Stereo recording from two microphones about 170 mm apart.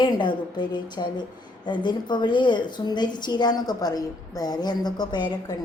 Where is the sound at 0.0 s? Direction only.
25° left (ahead or behind).